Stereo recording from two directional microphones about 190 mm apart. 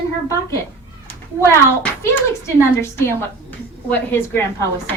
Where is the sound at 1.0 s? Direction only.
10° left (ahead or behind).